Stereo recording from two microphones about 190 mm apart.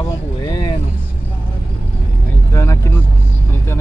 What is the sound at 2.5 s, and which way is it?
Speech, 15° left (ahead or behind).